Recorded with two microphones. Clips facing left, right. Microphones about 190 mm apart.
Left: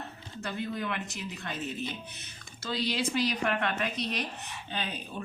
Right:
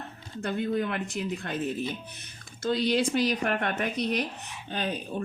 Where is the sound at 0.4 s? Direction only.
50° right (ahead or behind).